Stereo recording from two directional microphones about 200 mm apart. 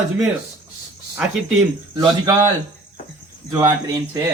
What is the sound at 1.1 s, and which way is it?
Speech, 5° right (ahead or behind).